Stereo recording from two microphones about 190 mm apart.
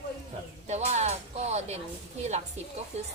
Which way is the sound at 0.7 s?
35° right (ahead or behind).